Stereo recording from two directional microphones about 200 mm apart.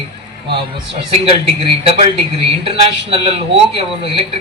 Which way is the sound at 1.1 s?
30° right (ahead or behind).